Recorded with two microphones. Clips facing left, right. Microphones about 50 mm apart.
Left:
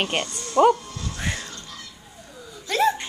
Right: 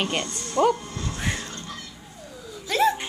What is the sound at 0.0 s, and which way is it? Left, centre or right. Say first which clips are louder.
Speech: left 1 dB; left.